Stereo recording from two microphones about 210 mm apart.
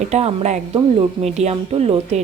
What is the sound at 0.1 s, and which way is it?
Speech, 30° right (ahead or behind).